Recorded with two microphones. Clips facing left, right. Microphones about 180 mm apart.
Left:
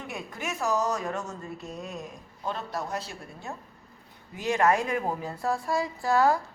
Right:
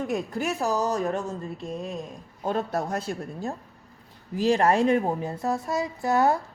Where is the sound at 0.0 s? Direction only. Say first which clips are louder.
Right 9 dB; 40° right (ahead or behind).